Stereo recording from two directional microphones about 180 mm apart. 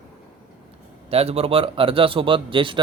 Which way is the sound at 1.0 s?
35° right (ahead or behind).